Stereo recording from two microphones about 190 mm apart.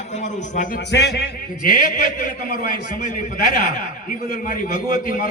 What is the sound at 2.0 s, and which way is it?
A man's voice, 45° left (ahead or behind).